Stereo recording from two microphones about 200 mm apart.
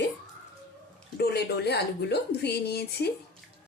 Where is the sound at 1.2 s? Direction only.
55° left (ahead or behind).